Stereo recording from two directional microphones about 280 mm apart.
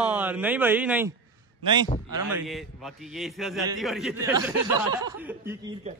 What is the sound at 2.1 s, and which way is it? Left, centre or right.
A man's voice, centre.